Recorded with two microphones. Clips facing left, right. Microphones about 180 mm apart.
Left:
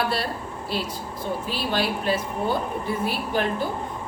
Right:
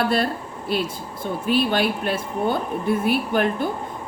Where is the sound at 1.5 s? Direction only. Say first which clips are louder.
Right 8 dB; 60° right (ahead or behind).